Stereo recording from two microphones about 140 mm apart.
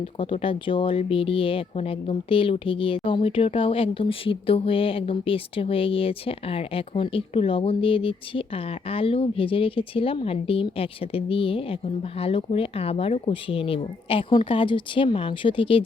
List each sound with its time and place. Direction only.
0.2 s speech: 40° left (ahead or behind)